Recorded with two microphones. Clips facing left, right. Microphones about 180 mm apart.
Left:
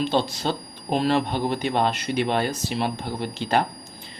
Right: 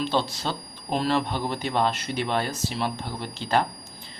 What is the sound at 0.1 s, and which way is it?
Speech, 20° left (ahead or behind).